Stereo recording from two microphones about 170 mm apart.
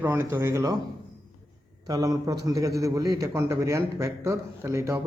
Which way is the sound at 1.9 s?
20° right (ahead or behind).